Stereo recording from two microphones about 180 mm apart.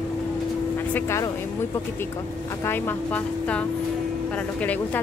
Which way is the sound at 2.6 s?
10° left (ahead or behind).